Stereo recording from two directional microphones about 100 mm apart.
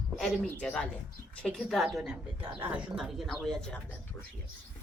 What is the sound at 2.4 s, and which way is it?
Speech, 20° right (ahead or behind).